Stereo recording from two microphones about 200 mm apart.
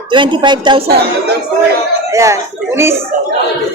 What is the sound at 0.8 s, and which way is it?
Speech, 50° right (ahead or behind).